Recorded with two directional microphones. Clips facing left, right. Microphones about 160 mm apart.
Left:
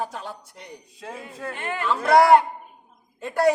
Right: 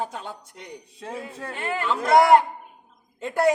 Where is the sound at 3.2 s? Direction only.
20° right (ahead or behind).